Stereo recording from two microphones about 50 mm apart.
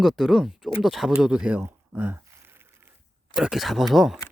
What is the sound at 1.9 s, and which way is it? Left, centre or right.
Speech, right.